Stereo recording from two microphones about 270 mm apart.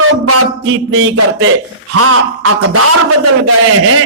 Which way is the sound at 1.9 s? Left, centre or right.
Right.